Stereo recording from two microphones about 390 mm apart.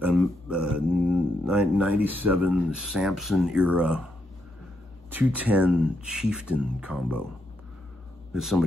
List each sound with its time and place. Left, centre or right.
0.0 s speech: centre
5.1 s speech: centre
8.3 s a man's voice: centre